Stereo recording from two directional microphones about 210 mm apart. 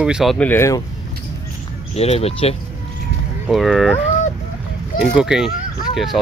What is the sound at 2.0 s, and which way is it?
Speech, 30° left (ahead or behind).